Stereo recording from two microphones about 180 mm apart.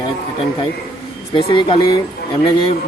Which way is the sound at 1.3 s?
30° left (ahead or behind).